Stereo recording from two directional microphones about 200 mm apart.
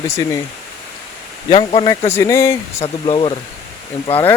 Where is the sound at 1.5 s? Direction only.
25° left (ahead or behind).